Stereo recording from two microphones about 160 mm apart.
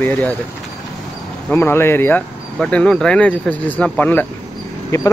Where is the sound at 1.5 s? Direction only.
15° left (ahead or behind).